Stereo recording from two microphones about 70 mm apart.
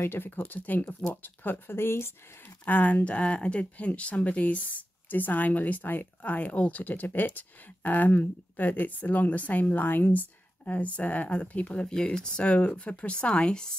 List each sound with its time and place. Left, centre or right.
0.0 s speech: left
2.6 s speech: left